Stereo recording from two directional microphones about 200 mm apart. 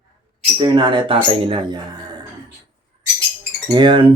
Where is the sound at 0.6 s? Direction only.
25° right (ahead or behind).